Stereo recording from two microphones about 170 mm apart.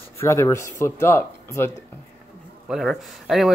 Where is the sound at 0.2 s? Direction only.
15° left (ahead or behind).